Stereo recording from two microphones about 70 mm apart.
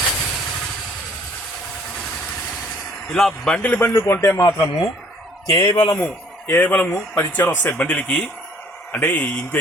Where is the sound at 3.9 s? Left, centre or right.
Left.